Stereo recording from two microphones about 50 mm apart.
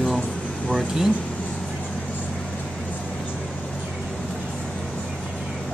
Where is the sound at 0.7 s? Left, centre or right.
Centre.